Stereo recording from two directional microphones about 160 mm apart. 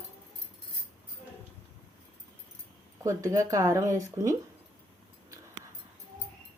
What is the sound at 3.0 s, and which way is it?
Speech, 20° right (ahead or behind).